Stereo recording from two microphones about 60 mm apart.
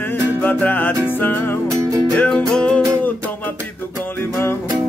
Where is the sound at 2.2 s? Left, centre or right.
Centre.